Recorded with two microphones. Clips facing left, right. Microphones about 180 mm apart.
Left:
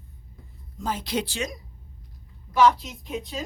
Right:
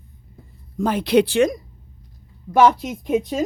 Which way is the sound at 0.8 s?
65° right (ahead or behind).